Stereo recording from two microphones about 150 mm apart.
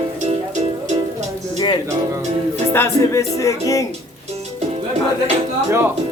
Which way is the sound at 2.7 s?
15° left (ahead or behind).